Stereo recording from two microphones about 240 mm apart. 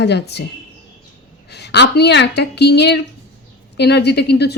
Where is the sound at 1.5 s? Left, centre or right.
Left.